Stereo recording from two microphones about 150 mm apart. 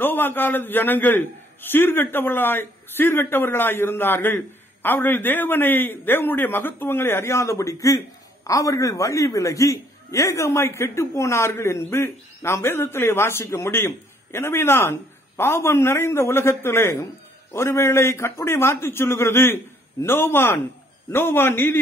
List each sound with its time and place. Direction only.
0.0 s a man's voice: 15° left (ahead or behind)